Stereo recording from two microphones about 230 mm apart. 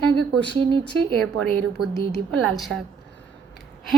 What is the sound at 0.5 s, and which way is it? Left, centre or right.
Speech, right.